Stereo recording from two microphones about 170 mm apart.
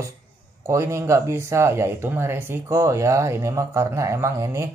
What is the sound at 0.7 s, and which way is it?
Speech, 15° right (ahead or behind).